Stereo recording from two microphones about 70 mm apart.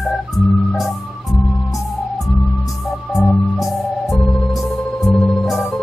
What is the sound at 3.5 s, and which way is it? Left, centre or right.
Organ, centre.